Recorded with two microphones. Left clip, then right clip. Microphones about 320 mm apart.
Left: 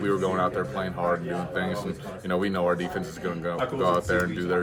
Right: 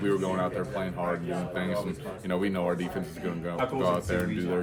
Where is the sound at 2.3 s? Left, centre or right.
Centre.